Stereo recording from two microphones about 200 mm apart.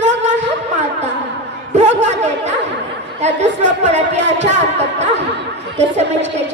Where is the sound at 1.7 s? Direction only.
35° right (ahead or behind).